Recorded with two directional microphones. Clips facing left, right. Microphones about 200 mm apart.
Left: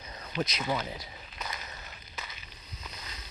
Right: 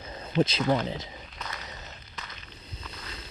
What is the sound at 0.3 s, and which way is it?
Speech, 30° right (ahead or behind).